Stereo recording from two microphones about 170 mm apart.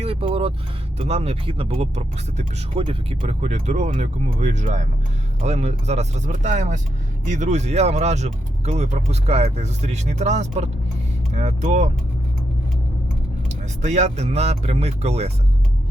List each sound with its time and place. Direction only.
0.0 s vehicle: 35° right (ahead or behind)
0.9 s speech: 40° right (ahead or behind)
13.5 s speech: 40° right (ahead or behind)